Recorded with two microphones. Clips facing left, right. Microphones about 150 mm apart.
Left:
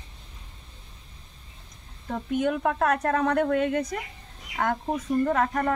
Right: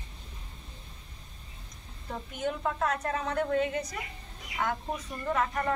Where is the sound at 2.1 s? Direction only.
55° left (ahead or behind).